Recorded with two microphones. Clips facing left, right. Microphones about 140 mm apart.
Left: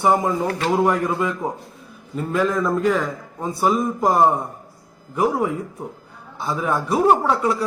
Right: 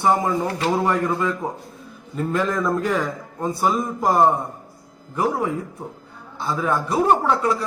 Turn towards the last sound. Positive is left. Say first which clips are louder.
# left 1 dB
turn(degrees=10)  # may be behind; listen again after turning